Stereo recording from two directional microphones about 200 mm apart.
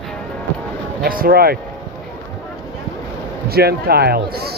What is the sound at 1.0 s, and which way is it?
Speech, 45° right (ahead or behind).